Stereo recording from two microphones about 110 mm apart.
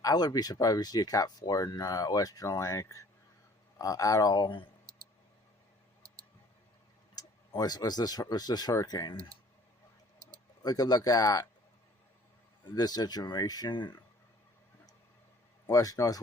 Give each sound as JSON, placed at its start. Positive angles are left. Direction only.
{"t": 0.0, "sound": "speech", "side_deg": 35}
{"t": 7.2, "sound": "speech", "side_deg": 35}
{"t": 10.6, "sound": "speech", "side_deg": 35}
{"t": 12.6, "sound": "speech", "side_deg": 40}
{"t": 15.7, "sound": "speech", "side_deg": 30}